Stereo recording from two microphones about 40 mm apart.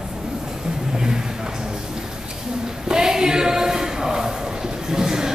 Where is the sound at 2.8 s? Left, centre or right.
Centre.